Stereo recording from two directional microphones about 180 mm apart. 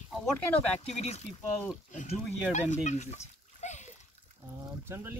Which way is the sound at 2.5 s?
40° left (ahead or behind).